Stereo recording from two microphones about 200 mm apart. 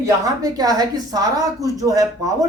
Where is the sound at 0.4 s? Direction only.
20° right (ahead or behind).